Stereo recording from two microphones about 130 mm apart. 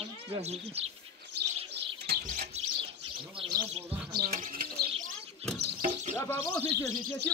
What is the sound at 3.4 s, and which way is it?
Chirp, 40° right (ahead or behind).